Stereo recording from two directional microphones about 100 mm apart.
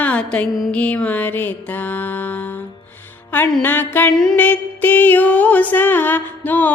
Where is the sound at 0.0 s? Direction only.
15° left (ahead or behind).